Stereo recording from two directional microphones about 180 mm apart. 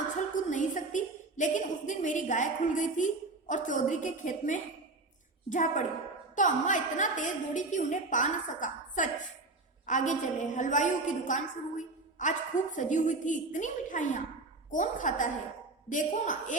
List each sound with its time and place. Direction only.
0.3 s a woman's voice: 45° left (ahead or behind)